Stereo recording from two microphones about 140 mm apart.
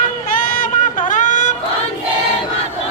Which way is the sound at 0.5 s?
70° left (ahead or behind).